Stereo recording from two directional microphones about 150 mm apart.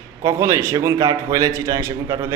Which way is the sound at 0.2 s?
20° right (ahead or behind).